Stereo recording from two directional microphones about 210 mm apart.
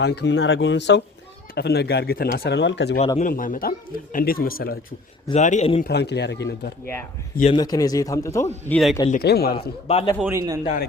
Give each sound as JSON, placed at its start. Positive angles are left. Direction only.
{"t": 0.0, "sound": "speech", "side_deg": 55}
{"t": 3.2, "sound": "speech", "side_deg": 40}
{"t": 5.3, "sound": "speech", "side_deg": 35}
{"t": 5.8, "sound": "speech", "side_deg": 50}
{"t": 7.5, "sound": "speech", "side_deg": 20}
{"t": 8.7, "sound": "speech", "side_deg": 0}
{"t": 9.0, "sound": "speech", "side_deg": 45}
{"t": 9.8, "sound": "a man's voice", "side_deg": 25}
{"t": 10.2, "sound": "a man's voice", "side_deg": -10}
{"t": 10.6, "sound": "speech", "side_deg": 40}